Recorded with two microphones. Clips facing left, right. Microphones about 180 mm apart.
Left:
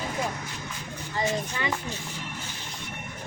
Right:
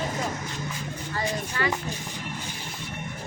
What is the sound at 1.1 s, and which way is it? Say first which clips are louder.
Speech: left 2 dB; 20° left (ahead or behind).